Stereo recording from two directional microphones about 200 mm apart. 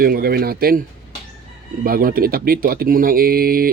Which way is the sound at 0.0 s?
50° right (ahead or behind).